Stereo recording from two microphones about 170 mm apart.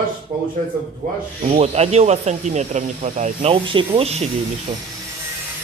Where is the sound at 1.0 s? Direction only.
45° right (ahead or behind).